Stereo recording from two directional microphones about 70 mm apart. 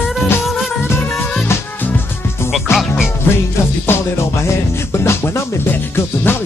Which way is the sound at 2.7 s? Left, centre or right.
Left.